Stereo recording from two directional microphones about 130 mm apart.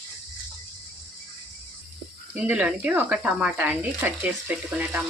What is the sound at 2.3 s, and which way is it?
Speech, 10° right (ahead or behind).